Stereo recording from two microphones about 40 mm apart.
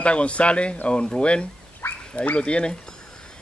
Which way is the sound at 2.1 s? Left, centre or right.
Left.